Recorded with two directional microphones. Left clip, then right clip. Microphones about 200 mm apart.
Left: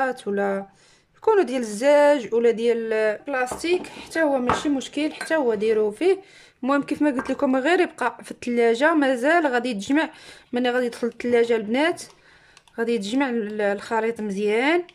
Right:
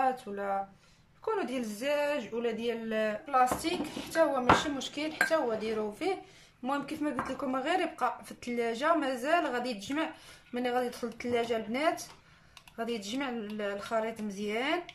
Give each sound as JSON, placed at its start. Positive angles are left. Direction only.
{"t": 0.0, "sound": "speech", "side_deg": 55}